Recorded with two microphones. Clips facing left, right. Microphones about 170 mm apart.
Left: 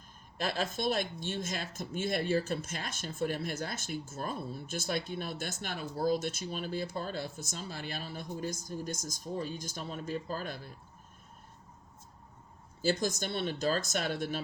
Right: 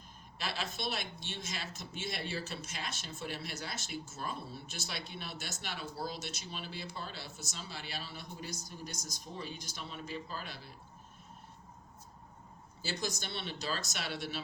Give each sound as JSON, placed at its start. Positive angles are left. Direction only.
{"t": 0.3, "sound": "speech", "side_deg": 50}
{"t": 12.8, "sound": "speech", "side_deg": 50}